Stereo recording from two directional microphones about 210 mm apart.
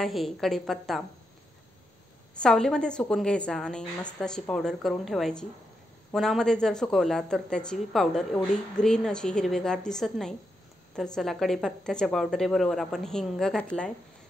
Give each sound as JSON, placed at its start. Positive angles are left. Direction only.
{"t": 0.0, "sound": "speech", "side_deg": 0}
{"t": 2.3, "sound": "speech", "side_deg": 5}